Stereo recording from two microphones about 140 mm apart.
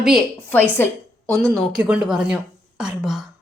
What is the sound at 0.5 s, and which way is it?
Speech, 15° left (ahead or behind).